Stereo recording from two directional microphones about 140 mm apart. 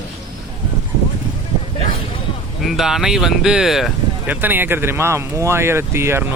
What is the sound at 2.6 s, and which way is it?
Speech, centre (ahead or behind).